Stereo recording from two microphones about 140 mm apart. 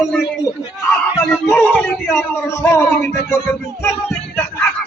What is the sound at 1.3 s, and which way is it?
Speech, 10° left (ahead or behind).